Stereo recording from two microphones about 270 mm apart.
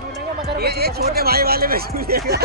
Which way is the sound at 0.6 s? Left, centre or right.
Right.